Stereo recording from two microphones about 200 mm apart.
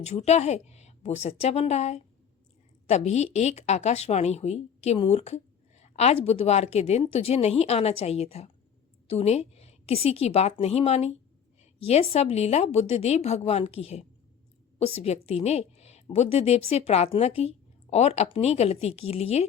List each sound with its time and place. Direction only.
0.0 s speech: 35° left (ahead or behind)